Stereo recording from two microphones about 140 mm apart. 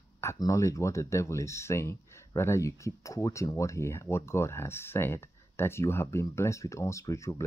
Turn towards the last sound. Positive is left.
turn(degrees=20)  # may be behind; listen again after turning